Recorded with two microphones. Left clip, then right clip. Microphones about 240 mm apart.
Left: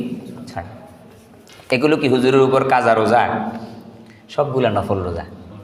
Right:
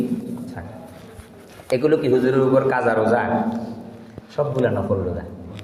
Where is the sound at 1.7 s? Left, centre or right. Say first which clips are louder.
Left 1 dB; left.